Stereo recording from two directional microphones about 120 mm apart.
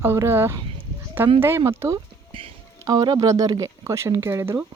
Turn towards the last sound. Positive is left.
turn(degrees=-25)  # may be behind; listen again after turning